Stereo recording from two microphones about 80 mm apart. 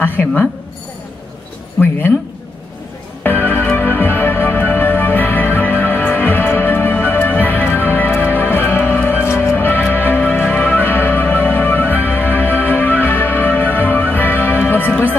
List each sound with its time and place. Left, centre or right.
0.2 s speech: centre
3.3 s music: left